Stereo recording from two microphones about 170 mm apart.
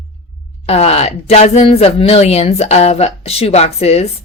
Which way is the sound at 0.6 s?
35° left (ahead or behind).